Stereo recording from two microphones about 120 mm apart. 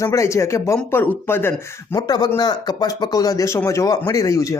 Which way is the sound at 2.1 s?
35° left (ahead or behind).